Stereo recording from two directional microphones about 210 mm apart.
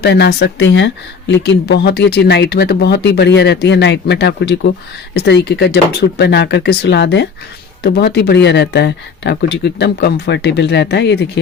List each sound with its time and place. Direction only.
0.0 s speech: 50° left (ahead or behind)